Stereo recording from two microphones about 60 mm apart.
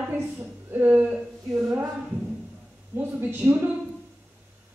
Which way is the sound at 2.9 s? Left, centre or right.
Right.